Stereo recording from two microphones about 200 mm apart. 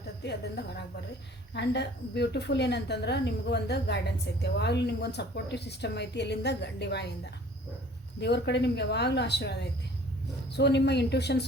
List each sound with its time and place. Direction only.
0.2 s a woman's voice: 55° left (ahead or behind)
8.2 s a woman's voice: 60° left (ahead or behind)